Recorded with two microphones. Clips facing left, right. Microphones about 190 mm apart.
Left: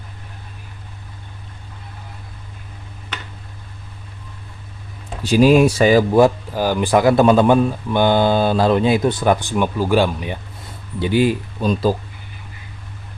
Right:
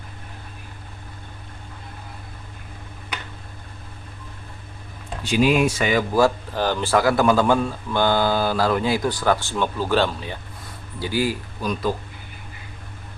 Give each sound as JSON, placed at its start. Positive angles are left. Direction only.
{"t": 5.2, "sound": "speech", "side_deg": 40}
{"t": 6.1, "sound": "speech", "side_deg": 15}